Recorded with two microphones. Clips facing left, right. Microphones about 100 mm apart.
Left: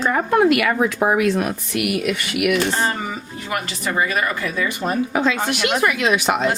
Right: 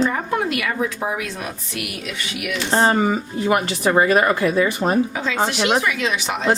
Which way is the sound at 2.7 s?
40° right (ahead or behind).